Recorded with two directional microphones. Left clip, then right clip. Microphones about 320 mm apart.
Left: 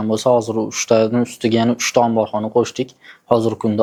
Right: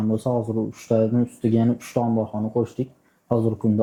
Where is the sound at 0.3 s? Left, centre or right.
Left.